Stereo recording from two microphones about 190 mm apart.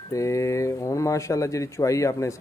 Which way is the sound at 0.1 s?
15° left (ahead or behind).